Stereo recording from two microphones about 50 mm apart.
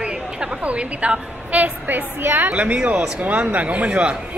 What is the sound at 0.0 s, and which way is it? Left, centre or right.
A woman's voice, right.